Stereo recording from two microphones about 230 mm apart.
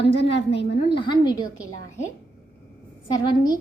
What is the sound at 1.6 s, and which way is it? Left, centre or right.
Speech, right.